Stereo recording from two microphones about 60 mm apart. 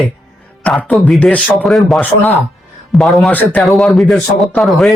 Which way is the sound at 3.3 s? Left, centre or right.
Left.